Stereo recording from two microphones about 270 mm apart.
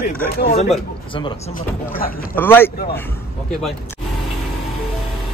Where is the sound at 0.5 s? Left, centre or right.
Left.